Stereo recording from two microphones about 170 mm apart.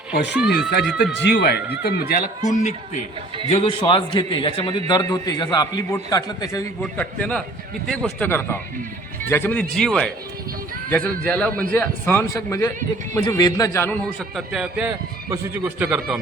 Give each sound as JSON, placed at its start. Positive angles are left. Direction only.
{"t": 0.3, "sound": "a man's voice", "side_deg": -5}
{"t": 1.1, "sound": "speech", "side_deg": 85}
{"t": 1.7, "sound": "speech", "side_deg": 65}
{"t": 2.4, "sound": "speech", "side_deg": 45}
{"t": 3.5, "sound": "a man's voice", "side_deg": 30}
{"t": 7.0, "sound": "a man's voice", "side_deg": 5}
{"t": 14.0, "sound": "a man's voice", "side_deg": 0}